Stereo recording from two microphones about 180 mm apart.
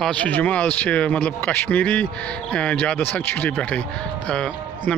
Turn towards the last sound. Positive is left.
turn(degrees=5)  # may be behind; listen again after turning